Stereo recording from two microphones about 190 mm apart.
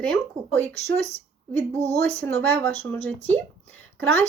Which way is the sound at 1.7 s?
15° right (ahead or behind).